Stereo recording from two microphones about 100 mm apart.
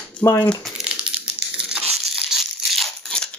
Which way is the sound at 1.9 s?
Centre (ahead or behind).